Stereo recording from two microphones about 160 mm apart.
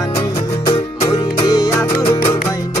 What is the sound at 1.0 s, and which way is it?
Music, 25° left (ahead or behind).